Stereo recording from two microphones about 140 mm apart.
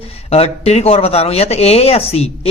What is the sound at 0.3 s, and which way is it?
Speech, 50° left (ahead or behind).